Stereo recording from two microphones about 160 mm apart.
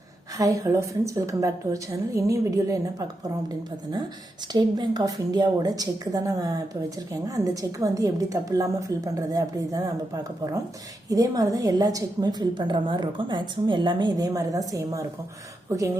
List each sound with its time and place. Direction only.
0.3 s a woman's voice: 20° right (ahead or behind)